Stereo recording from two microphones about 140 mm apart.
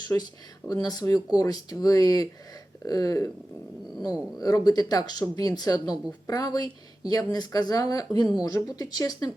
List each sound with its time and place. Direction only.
0.1 s speech: 20° left (ahead or behind)